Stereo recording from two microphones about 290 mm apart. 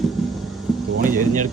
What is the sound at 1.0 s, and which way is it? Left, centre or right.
Speech, right.